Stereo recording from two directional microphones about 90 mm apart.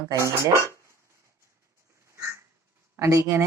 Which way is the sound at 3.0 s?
35° right (ahead or behind).